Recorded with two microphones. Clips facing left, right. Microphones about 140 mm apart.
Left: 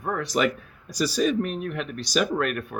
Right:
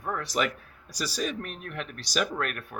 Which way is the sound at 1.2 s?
5° left (ahead or behind).